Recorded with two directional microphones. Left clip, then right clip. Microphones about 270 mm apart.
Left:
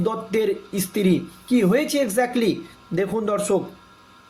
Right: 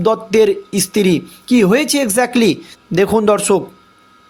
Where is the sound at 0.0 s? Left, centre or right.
Right.